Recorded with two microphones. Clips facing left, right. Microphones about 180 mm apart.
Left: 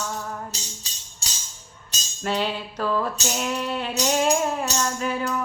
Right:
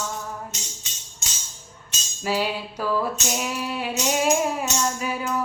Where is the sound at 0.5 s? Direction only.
35° left (ahead or behind).